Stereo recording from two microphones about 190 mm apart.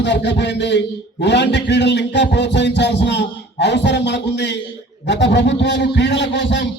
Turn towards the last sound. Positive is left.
turn(degrees=70)  # may be behind; listen again after turning